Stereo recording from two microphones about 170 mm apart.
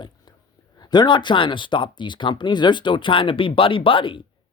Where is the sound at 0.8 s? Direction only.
25° left (ahead or behind).